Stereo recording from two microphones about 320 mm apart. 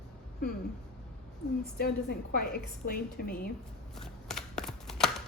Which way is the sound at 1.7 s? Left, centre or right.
Left.